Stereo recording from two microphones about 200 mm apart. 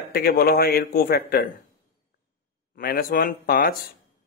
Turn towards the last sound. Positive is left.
turn(degrees=45)  # may be behind; listen again after turning